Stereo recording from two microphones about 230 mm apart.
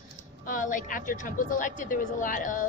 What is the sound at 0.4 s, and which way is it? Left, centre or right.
Speech, left.